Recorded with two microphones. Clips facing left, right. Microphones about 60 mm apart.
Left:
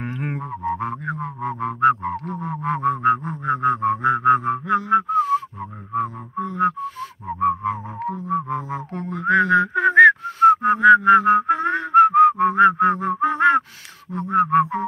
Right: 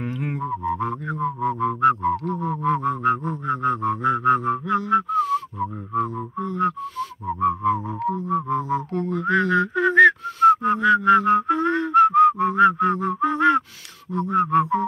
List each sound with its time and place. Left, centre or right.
0.0 s didgeridoo: left
0.4 s didgeridoo: centre
0.7 s music: left
5.6 s a sound: centre
6.6 s music: left
8.1 s mantra: centre; by 13.7 s left
14.3 s a sound: left